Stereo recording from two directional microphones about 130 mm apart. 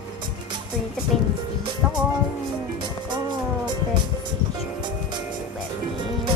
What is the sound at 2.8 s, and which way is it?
Music, 35° right (ahead or behind).